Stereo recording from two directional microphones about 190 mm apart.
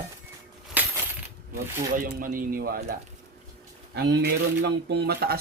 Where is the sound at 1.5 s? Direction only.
50° right (ahead or behind).